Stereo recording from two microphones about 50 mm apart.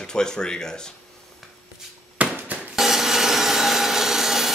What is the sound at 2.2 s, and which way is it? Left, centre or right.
Music, right.